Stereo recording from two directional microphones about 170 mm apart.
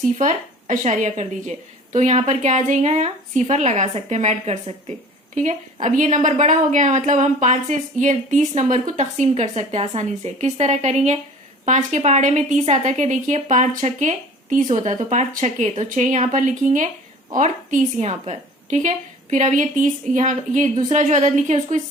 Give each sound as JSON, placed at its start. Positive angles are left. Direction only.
{"t": 0.2, "sound": "a woman's voice", "side_deg": -50}